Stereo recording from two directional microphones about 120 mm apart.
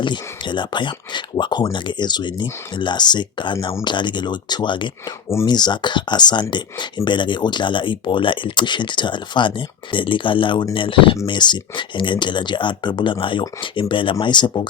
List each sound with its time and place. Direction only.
0.0 s speech: 40° left (ahead or behind)